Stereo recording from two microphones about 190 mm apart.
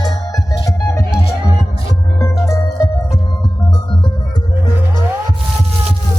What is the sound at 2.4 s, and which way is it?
Music, 15° left (ahead or behind).